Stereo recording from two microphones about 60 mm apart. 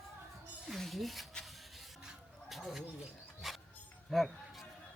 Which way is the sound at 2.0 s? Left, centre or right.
Centre.